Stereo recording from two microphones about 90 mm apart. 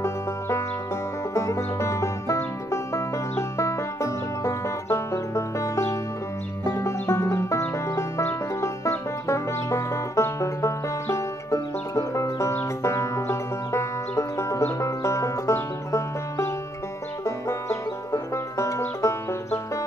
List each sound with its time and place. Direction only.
0.0 s music: 35° left (ahead or behind)